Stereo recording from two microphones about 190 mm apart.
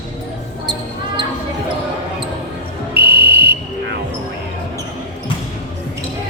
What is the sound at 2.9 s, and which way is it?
Music, 55° right (ahead or behind).